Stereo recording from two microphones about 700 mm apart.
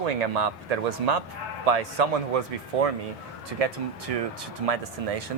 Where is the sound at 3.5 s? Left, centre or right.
Right.